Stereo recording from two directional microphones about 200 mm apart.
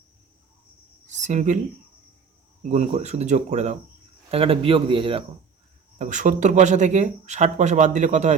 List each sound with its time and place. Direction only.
1.0 s a sound: 35° right (ahead or behind)
2.6 s a man's voice: 35° right (ahead or behind)
6.0 s speech: 40° right (ahead or behind)